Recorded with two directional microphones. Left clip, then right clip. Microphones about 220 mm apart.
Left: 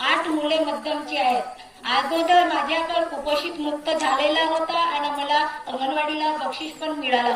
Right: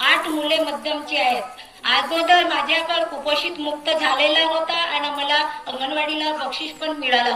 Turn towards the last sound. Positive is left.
turn(degrees=-20)  # may be behind; listen again after turning